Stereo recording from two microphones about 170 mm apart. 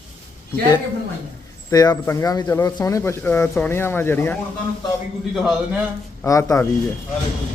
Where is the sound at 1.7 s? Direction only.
20° left (ahead or behind).